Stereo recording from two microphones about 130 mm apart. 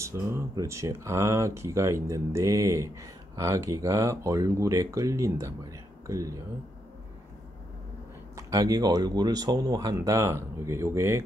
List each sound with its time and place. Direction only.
0.0 s speech: 20° right (ahead or behind)
8.4 s speech: 25° right (ahead or behind)